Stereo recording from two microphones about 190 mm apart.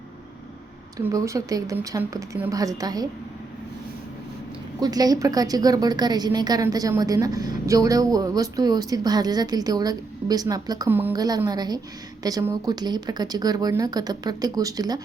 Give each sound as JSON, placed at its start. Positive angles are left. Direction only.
{"t": 0.9, "sound": "speech", "side_deg": -15}
{"t": 4.8, "sound": "a woman's voice", "side_deg": -20}